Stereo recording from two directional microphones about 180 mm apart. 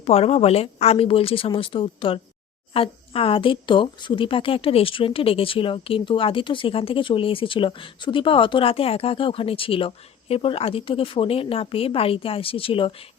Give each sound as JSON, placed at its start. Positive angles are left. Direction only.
{"t": 0.0, "sound": "a woman's voice", "side_deg": 35}